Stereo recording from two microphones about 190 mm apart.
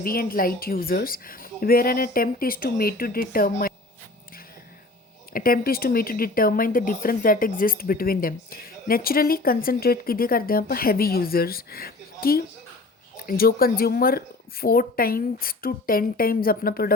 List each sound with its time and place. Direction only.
0.0 s speech: 50° left (ahead or behind)
5.3 s speech: 50° left (ahead or behind)